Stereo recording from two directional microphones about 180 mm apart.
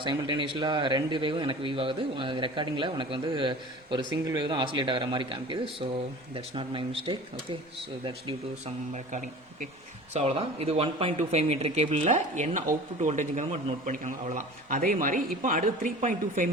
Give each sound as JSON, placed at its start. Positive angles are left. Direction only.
{"t": 0.0, "sound": "speech", "side_deg": -25}
{"t": 10.2, "sound": "speech", "side_deg": -35}